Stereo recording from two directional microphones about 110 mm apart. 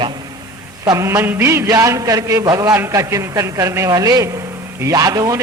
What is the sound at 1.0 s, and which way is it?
A man's voice, 25° right (ahead or behind).